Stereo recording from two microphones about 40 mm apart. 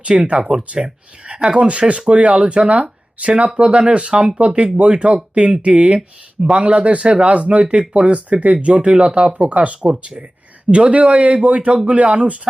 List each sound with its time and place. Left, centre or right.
0.3 s speech: centre
1.2 s speech: right